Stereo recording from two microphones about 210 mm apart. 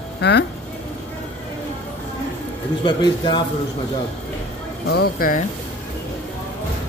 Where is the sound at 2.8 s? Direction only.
20° left (ahead or behind).